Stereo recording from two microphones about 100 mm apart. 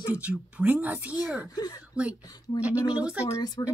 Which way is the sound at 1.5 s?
40° left (ahead or behind).